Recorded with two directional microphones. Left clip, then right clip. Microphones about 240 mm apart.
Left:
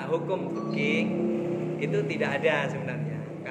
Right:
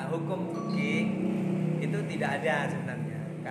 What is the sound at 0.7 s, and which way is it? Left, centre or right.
A man's voice, centre.